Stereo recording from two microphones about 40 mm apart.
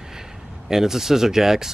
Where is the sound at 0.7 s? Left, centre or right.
Centre.